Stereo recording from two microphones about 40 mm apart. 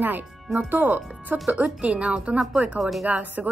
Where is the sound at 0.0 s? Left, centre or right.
Right.